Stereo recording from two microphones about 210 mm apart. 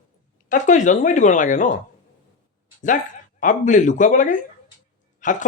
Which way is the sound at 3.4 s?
35° left (ahead or behind).